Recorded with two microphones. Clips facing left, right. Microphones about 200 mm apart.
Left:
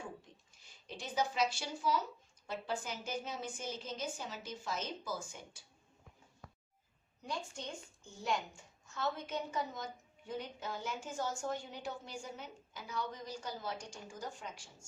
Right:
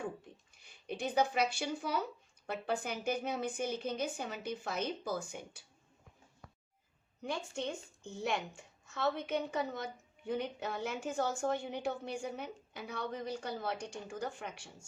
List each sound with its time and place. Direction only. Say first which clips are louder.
0.5 s a woman's voice: right 8 dB; 60° right (ahead or behind)
7.2 s a woman's voice: right 5 dB; 65° right (ahead or behind)